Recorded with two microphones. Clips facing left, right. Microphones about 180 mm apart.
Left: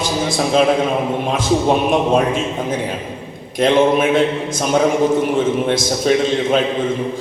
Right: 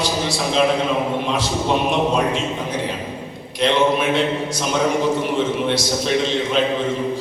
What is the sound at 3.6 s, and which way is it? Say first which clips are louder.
A man's voice: left 4 dB; 50° left (ahead or behind).